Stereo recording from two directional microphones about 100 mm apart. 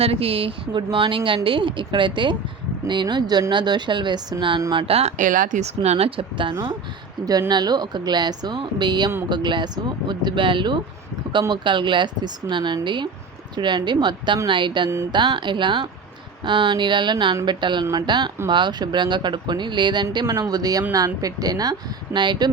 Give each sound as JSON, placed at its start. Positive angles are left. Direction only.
{"t": 0.0, "sound": "speech", "side_deg": -80}
{"t": 4.7, "sound": "speech", "side_deg": -65}
{"t": 7.3, "sound": "speech", "side_deg": -40}
{"t": 20.2, "sound": "a woman's voice", "side_deg": -35}